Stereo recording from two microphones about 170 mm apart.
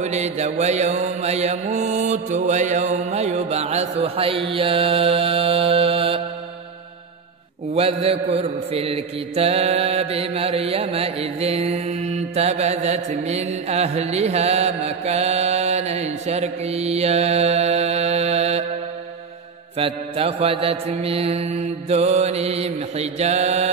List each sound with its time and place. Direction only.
0.0 s mantra: 40° right (ahead or behind)
7.7 s mantra: 35° right (ahead or behind)
19.8 s mantra: 35° right (ahead or behind)